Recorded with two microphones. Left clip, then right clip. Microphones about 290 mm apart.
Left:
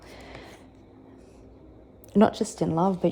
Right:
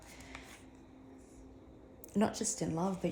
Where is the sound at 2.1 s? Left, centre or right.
Left.